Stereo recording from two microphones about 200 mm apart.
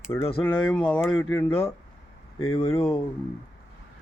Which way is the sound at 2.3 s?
90° left.